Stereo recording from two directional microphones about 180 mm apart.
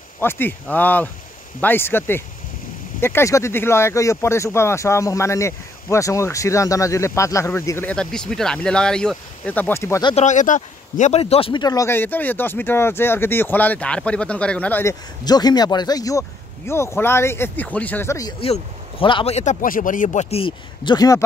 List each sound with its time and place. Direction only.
0.2 s speech: 10° left (ahead or behind)
10.0 s speech: 40° left (ahead or behind); by 18.3 s 15° left (ahead or behind)
18.4 s speech: 30° left (ahead or behind)